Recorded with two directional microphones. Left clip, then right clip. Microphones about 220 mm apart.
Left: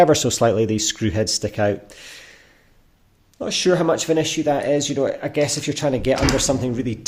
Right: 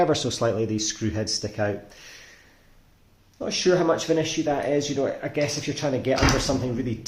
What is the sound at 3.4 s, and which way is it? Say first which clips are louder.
Speech: left 3 dB; 45° left (ahead or behind).